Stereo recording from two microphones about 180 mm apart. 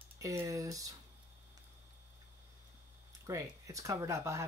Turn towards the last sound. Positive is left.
turn(degrees=-15)  # may be behind; listen again after turning